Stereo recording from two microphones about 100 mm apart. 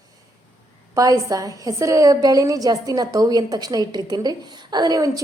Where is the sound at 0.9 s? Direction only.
35° right (ahead or behind).